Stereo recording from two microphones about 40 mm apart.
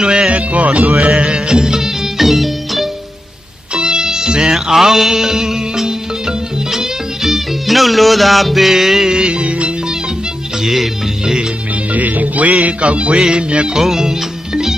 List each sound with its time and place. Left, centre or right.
0.3 s music: right; by 1.9 s centre
2.1 s music: centre
3.7 s music: right
9.1 s music: right
10.6 s music: centre
11.9 s music: right
13.7 s music: centre